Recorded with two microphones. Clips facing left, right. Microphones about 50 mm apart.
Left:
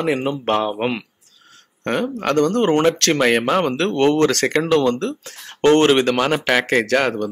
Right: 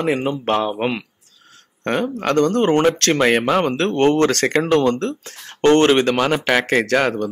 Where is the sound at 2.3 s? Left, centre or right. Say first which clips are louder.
Right 1 dB; right.